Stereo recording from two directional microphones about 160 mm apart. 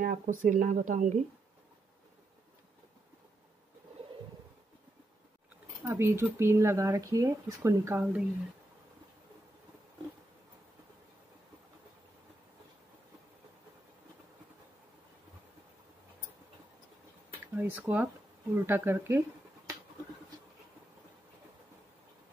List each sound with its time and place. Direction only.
0.0 s speech: 55° right (ahead or behind)
5.9 s speech: 15° right (ahead or behind)
17.6 s speech: 10° right (ahead or behind)